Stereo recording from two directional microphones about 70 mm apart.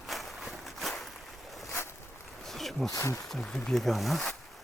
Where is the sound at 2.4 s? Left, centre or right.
Centre.